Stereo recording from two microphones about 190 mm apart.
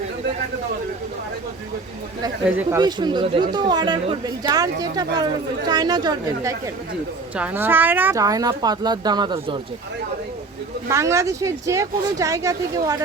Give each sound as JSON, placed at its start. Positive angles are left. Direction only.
{"t": 2.4, "sound": "speech", "side_deg": -10}
{"t": 2.8, "sound": "speech", "side_deg": -25}
{"t": 7.3, "sound": "speech", "side_deg": -10}
{"t": 10.8, "sound": "speech", "side_deg": -15}